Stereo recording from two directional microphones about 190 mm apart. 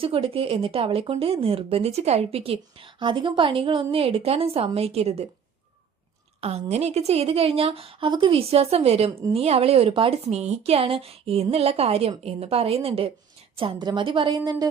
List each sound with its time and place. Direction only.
0.0 s speech: 30° right (ahead or behind)
6.4 s speech: 35° right (ahead or behind)